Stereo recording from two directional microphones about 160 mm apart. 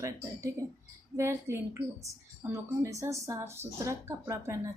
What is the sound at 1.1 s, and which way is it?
A woman's voice, 15° right (ahead or behind).